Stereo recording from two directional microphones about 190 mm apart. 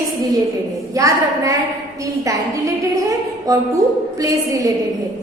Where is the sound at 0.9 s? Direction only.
15° right (ahead or behind).